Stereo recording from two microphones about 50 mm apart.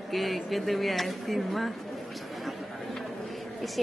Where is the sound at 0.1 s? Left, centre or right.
Centre.